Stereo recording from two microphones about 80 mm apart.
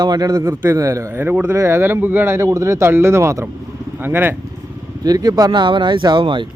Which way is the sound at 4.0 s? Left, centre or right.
Right.